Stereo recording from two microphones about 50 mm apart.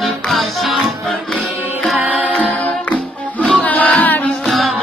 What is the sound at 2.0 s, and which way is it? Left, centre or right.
Music, right.